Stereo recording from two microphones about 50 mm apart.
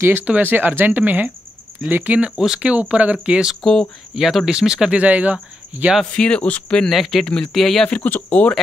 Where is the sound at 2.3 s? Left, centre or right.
Centre.